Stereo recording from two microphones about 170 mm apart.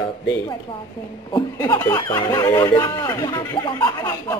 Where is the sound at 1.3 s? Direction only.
20° left (ahead or behind).